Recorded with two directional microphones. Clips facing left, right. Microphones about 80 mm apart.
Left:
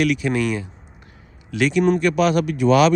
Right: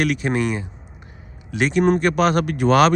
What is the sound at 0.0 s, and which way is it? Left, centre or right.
Speech, right.